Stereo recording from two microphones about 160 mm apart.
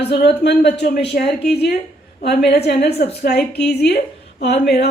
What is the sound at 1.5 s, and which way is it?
A woman's voice, 90° left.